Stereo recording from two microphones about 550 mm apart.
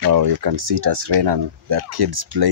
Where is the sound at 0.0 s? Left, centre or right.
Right.